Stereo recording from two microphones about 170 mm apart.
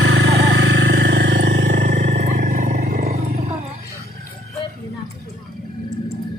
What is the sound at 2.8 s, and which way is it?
Roaring cats, 45° right (ahead or behind).